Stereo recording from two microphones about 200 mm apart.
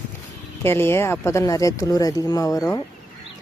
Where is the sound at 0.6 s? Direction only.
10° left (ahead or behind).